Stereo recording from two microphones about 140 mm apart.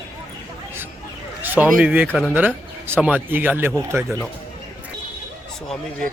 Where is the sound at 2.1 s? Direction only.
5° left (ahead or behind).